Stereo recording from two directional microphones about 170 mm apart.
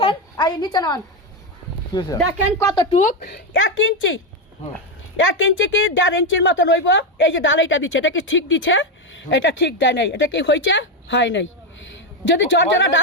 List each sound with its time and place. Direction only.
0.0 s a sound: 30° left (ahead or behind)
1.9 s speech: 25° left (ahead or behind)
2.9 s speech: 50° left (ahead or behind)
3.2 s a woman's voice: 70° left (ahead or behind); by 13.0 s 90° left